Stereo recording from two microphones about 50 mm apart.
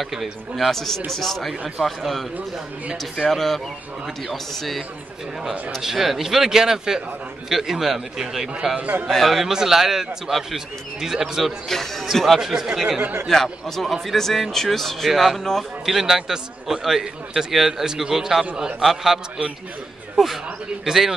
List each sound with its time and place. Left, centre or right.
0.0 s a man's voice: centre
8.7 s a man's voice: right
9.1 s a man's voice: centre
11.7 s speech: centre
12.4 s a man's voice: centre
13.0 s a man's voice: right
13.3 s a man's voice: centre